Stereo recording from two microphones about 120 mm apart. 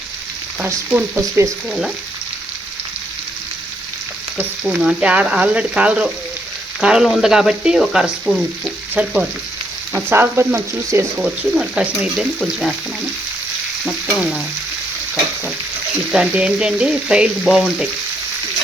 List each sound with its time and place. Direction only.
0.6 s frying: 15° right (ahead or behind)
4.4 s frying: 10° right (ahead or behind)
9.0 s frying: 15° right (ahead or behind)
11.2 s frying: 5° right (ahead or behind)
13.8 s frying: centre (ahead or behind)
16.1 s frying: 10° right (ahead or behind)